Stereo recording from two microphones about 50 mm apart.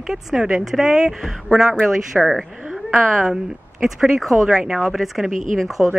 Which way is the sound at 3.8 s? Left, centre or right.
Centre.